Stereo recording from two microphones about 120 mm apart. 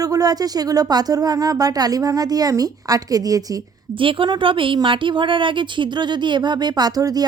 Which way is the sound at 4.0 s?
45° right (ahead or behind).